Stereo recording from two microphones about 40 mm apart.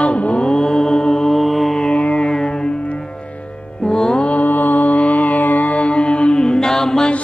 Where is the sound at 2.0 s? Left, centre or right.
Left.